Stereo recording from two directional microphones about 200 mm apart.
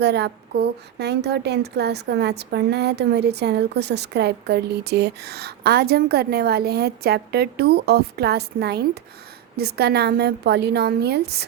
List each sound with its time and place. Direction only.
0.0 s a woman's voice: 55° right (ahead or behind)